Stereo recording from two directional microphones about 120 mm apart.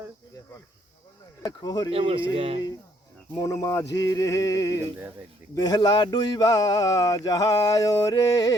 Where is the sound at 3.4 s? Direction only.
25° left (ahead or behind).